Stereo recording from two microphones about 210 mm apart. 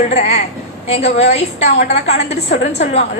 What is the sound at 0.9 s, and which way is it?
A woman's voice, 30° left (ahead or behind).